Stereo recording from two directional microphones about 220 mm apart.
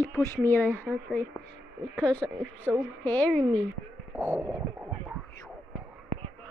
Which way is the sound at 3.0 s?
5° left (ahead or behind).